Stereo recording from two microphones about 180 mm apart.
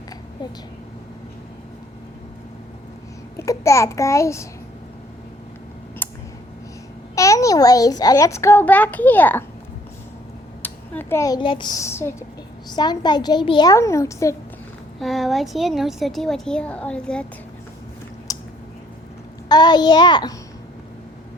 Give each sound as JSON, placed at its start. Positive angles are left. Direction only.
{"t": 3.3, "sound": "a child's voice", "side_deg": 15}
{"t": 6.0, "sound": "a sound", "side_deg": 10}
{"t": 7.2, "sound": "a child's voice", "side_deg": 20}
{"t": 10.6, "sound": "a child's voice", "side_deg": 10}
{"t": 14.9, "sound": "a woman's voice", "side_deg": 0}
{"t": 18.3, "sound": "a sound", "side_deg": 20}
{"t": 19.5, "sound": "a child's voice", "side_deg": 25}